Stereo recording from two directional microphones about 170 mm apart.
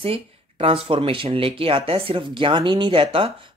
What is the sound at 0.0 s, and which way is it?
Speech, 35° right (ahead or behind).